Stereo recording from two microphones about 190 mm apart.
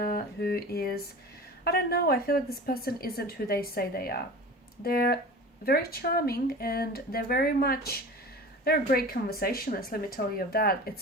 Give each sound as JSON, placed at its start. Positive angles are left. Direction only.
{"t": 0.0, "sound": "a woman's voice", "side_deg": 50}